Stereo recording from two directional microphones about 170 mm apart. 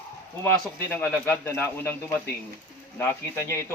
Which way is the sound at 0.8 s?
15° left (ahead or behind).